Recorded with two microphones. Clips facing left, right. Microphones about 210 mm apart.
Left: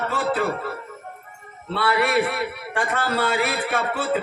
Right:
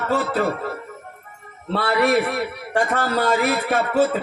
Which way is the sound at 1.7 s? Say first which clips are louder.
Right 2 dB; 40° right (ahead or behind).